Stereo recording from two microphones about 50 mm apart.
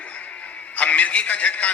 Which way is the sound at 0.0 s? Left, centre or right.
Left.